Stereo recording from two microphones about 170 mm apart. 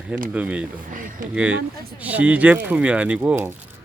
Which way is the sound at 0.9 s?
50° right (ahead or behind).